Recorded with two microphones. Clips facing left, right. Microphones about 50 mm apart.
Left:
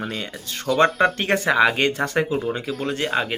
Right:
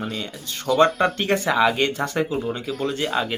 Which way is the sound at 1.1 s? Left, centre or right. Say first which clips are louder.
Left 1 dB; left.